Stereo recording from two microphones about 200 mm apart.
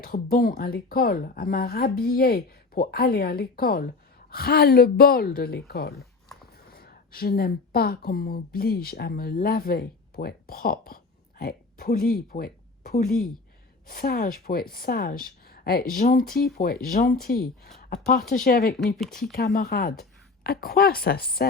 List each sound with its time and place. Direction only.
0.0 s speech: 45° left (ahead or behind)
13.1 s speech: centre (ahead or behind)
13.8 s speech: 45° left (ahead or behind)
18.9 s speech: centre (ahead or behind)
19.2 s a woman's voice: 50° left (ahead or behind)